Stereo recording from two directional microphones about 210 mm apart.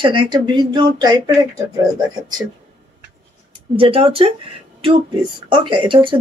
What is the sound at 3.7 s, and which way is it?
Speech, 25° right (ahead or behind).